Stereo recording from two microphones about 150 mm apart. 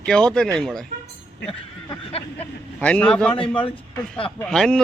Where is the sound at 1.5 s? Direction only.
40° left (ahead or behind).